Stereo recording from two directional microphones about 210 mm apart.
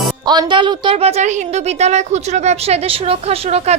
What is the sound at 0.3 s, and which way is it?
A woman's voice, 20° right (ahead or behind).